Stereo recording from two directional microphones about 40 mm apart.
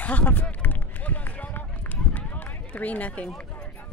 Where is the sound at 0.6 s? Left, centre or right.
Left.